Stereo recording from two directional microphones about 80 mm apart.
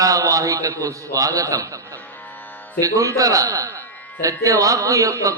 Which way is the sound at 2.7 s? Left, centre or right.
Right.